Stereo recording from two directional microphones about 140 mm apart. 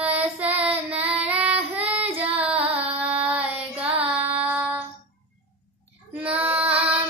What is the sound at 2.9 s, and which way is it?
Child singing, 10° right (ahead or behind).